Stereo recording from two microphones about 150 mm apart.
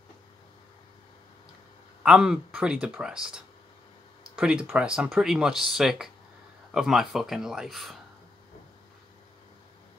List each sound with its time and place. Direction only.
2.0 s speech: 5° right (ahead or behind)